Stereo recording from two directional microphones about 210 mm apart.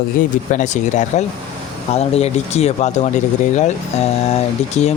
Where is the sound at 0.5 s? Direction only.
35° left (ahead or behind).